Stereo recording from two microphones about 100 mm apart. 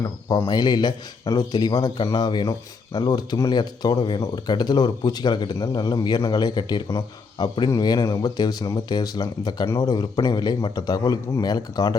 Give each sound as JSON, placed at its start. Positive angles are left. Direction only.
{"t": 0.4, "sound": "a man's voice", "side_deg": 45}